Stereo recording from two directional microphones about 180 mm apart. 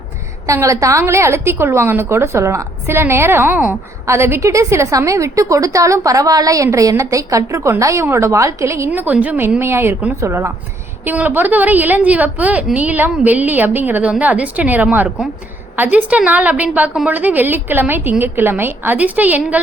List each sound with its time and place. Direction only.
0.4 s a woman's voice: 15° right (ahead or behind)